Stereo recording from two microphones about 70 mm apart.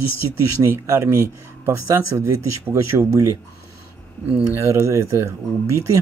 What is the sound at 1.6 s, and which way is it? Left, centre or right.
Speech, right.